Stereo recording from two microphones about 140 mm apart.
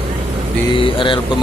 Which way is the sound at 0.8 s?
35° left (ahead or behind).